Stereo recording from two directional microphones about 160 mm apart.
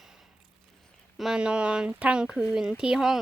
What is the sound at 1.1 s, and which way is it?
Speech, 5° right (ahead or behind).